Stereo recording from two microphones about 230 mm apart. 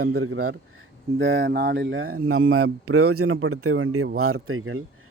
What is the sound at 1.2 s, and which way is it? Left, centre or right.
Speech, right.